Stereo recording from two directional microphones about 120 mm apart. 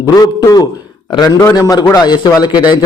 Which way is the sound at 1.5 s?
30° left (ahead or behind).